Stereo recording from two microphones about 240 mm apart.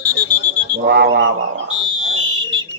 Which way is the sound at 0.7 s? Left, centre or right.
Right.